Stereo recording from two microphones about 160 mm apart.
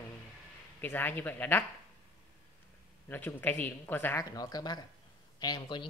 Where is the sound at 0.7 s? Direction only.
10° left (ahead or behind).